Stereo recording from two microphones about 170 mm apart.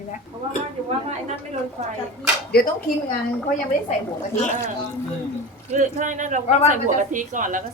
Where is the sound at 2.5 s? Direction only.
65° left (ahead or behind).